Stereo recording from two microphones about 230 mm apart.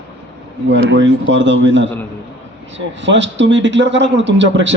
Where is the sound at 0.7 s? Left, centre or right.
Right.